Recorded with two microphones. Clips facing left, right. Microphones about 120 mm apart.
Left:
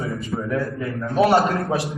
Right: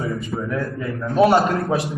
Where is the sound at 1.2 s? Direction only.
15° right (ahead or behind).